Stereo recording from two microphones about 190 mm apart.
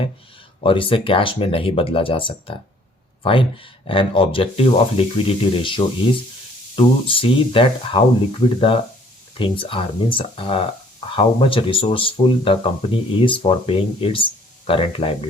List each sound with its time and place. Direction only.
0.6 s speech: 30° left (ahead or behind)
9.4 s speech: 25° left (ahead or behind)